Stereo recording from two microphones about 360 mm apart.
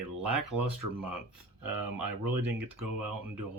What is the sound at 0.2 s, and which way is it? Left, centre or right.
Speech, right.